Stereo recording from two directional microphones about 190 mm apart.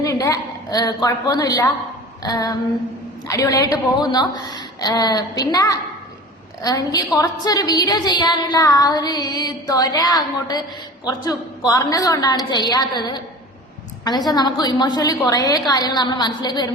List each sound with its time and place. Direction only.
0.0 s a woman's voice: 15° left (ahead or behind)